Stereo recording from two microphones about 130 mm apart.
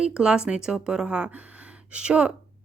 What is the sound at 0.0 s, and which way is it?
Speech, 5° right (ahead or behind).